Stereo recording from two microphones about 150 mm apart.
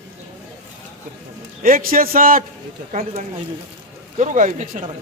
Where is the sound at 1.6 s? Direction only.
70° right (ahead or behind).